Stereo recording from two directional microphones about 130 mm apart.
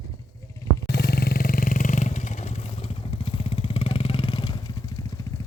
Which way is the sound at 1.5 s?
90° left.